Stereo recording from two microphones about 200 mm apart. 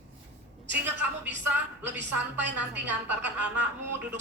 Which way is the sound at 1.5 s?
10° right (ahead or behind).